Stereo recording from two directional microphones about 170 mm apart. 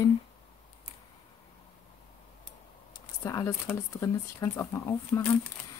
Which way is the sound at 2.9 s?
15° left (ahead or behind).